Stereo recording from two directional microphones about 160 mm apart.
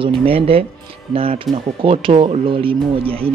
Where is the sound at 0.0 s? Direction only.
35° right (ahead or behind).